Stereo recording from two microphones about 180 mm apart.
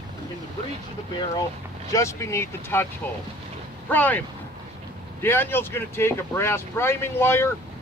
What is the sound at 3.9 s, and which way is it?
Speech, 10° left (ahead or behind).